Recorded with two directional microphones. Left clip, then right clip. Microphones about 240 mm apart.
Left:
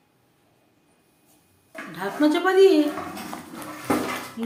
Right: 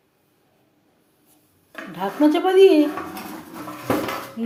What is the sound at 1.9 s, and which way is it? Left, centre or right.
Speech, centre.